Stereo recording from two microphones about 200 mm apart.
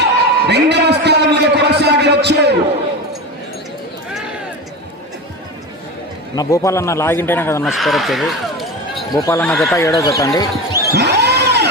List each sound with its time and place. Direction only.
0.0 s a sound: 55° right (ahead or behind)
6.3 s speech: 15° left (ahead or behind)
7.7 s speech: centre (ahead or behind)
9.1 s speech: 15° left (ahead or behind)
9.5 s speech: centre (ahead or behind)
9.7 s speech: 15° left (ahead or behind)
10.9 s a sound: 55° right (ahead or behind)